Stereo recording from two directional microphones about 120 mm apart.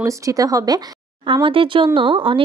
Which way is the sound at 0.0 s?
25° right (ahead or behind).